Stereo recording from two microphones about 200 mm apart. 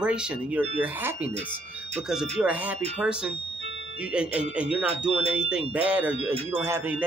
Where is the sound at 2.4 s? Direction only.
10° right (ahead or behind).